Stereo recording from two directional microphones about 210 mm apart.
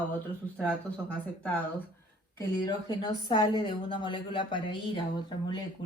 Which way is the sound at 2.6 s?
20° left (ahead or behind).